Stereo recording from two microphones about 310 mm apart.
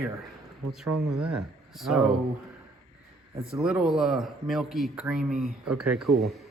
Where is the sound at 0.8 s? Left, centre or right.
Right.